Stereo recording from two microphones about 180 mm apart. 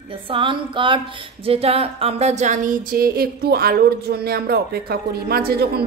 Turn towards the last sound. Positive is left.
turn(degrees=-60)  # may be behind; listen again after turning